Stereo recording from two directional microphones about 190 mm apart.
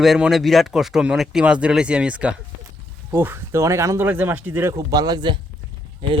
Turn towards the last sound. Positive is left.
turn(degrees=-25)  # may be behind; listen again after turning